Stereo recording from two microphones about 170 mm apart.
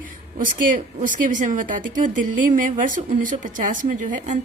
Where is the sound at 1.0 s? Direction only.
50° right (ahead or behind).